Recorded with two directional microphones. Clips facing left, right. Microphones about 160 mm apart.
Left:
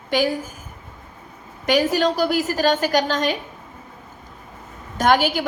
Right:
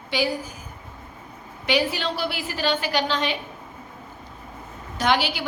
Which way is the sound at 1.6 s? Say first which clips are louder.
Left 6 dB; 45° left (ahead or behind).